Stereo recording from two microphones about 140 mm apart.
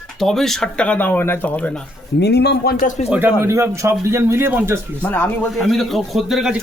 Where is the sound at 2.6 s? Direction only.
85° left.